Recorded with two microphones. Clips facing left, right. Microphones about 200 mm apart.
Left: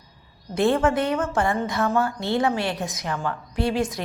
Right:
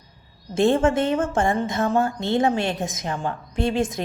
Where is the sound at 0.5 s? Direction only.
25° right (ahead or behind).